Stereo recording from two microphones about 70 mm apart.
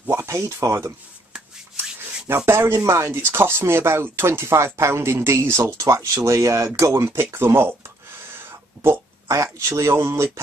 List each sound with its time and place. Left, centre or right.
0.0 s speech: right
2.2 s speech: right
8.3 s a sound: right
9.3 s speech: right